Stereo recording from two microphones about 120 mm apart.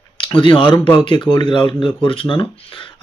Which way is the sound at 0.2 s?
45° left (ahead or behind).